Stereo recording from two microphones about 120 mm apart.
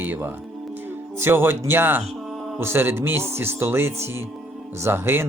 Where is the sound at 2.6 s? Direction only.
20° right (ahead or behind).